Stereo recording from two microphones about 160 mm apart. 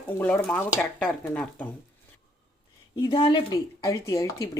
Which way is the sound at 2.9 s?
25° left (ahead or behind).